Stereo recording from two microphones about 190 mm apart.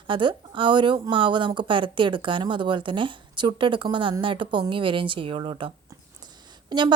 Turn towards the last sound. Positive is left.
turn(degrees=-25)  # may be behind; listen again after turning